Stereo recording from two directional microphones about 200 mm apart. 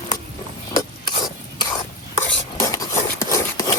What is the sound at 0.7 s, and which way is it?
Filing, 20° left (ahead or behind).